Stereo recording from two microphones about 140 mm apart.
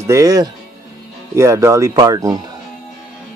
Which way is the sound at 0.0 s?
25° right (ahead or behind).